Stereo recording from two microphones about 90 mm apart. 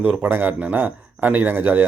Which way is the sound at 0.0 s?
15° right (ahead or behind).